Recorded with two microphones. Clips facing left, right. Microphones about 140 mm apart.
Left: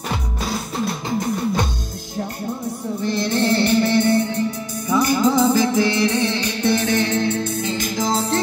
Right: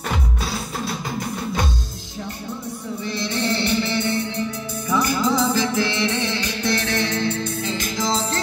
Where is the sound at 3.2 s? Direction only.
45° left (ahead or behind).